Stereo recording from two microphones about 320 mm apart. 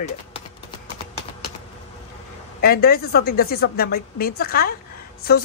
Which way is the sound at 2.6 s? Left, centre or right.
Left.